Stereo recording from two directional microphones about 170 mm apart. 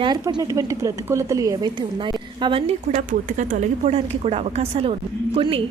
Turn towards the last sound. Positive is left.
turn(degrees=-35)  # may be behind; listen again after turning